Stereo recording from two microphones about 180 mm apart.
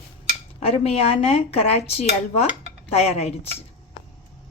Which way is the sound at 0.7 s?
35° left (ahead or behind).